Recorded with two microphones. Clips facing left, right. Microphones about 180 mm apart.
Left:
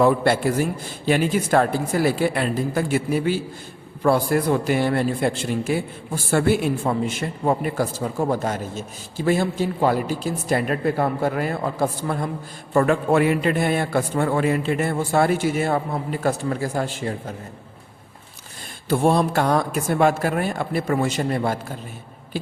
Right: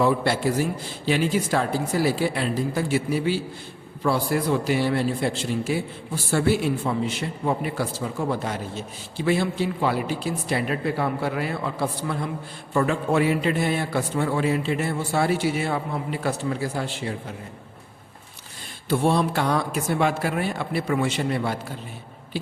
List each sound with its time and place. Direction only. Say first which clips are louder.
0.0 s a man's voice: left 4 dB; 55° left (ahead or behind)
18.9 s a man's voice: left 3 dB; 45° left (ahead or behind)